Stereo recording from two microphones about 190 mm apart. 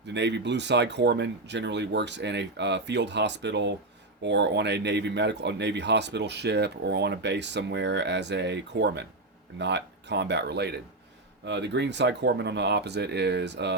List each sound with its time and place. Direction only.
0.1 s speech: 65° right (ahead or behind)